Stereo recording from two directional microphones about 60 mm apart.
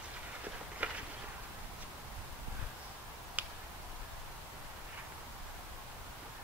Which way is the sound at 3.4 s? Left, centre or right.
Right.